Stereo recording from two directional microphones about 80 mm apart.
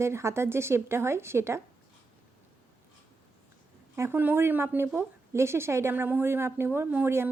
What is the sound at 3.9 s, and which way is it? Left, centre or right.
Speech, right.